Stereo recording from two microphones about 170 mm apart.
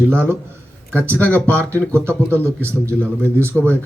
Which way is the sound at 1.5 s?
15° right (ahead or behind).